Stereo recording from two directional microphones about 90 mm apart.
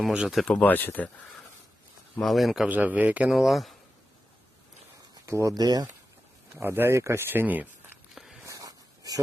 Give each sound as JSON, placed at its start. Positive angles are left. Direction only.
{"t": 0.1, "sound": "a man's voice", "side_deg": -10}
{"t": 0.3, "sound": "speech", "side_deg": 5}
{"t": 0.6, "sound": "speech", "side_deg": 20}
{"t": 2.2, "sound": "speech", "side_deg": 0}
{"t": 2.6, "sound": "a man's voice", "side_deg": -15}
{"t": 3.3, "sound": "speech", "side_deg": 0}
{"t": 5.2, "sound": "speech", "side_deg": -35}
{"t": 6.6, "sound": "speech", "side_deg": -25}
{"t": 8.1, "sound": "a sound", "side_deg": -5}
{"t": 8.4, "sound": "a sound", "side_deg": -40}